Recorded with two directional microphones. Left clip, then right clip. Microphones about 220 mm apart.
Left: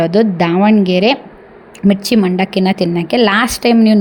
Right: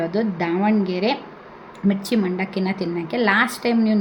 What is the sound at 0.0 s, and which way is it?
A woman's voice, 40° left (ahead or behind).